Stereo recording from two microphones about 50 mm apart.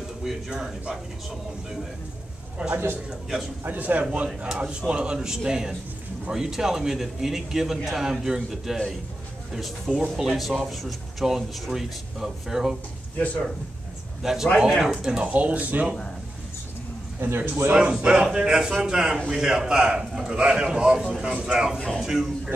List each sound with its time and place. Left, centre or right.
0.2 s a man's voice: centre
2.7 s a man's voice: right
3.1 s a man's voice: centre
3.6 s a man's voice: right; by 12.7 s centre
14.2 s a man's voice: centre
15.1 s speech: right
17.2 s a man's voice: right
17.7 s a man's voice: centre
21.3 s speech: right
21.7 s speech: centre
22.0 s a man's voice: centre